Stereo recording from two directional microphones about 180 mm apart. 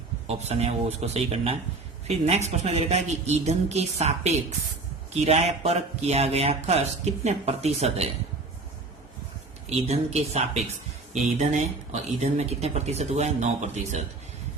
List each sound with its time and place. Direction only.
0.3 s a man's voice: 35° right (ahead or behind)
9.6 s a man's voice: 35° right (ahead or behind)